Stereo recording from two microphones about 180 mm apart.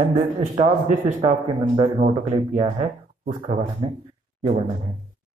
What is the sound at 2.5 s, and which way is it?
Speech, 35° right (ahead or behind).